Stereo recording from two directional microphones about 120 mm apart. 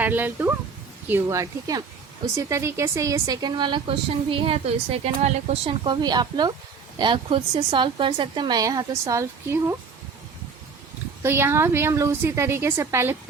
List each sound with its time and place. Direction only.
0.0 s speech: 15° right (ahead or behind)
1.3 s a woman's voice: 30° right (ahead or behind); by 5.7 s 65° right (ahead or behind)
5.8 s a woman's voice: 35° right (ahead or behind)
11.2 s a woman's voice: 20° right (ahead or behind)